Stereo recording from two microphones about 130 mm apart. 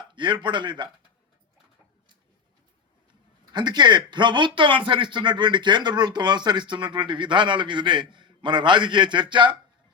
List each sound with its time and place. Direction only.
0.0 s a man's voice: 35° right (ahead or behind)
3.5 s a man's voice: 35° right (ahead or behind)